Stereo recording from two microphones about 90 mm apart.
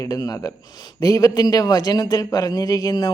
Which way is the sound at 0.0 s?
40° left (ahead or behind).